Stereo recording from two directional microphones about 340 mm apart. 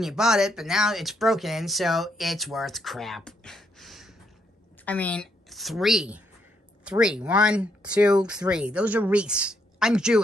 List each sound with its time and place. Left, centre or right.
0.0 s a woman's voice: centre